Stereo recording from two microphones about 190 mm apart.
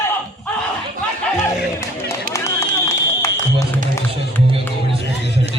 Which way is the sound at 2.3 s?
15° left (ahead or behind).